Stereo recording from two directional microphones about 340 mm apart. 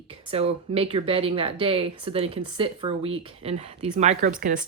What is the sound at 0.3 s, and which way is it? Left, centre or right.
Speech, centre.